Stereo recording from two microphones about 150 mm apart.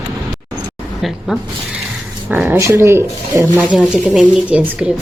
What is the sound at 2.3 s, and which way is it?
A woman's voice, 15° right (ahead or behind).